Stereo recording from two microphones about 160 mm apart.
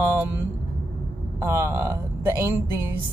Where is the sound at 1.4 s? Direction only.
20° right (ahead or behind).